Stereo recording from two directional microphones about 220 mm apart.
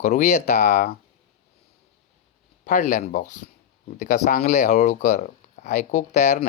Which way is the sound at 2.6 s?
35° left (ahead or behind).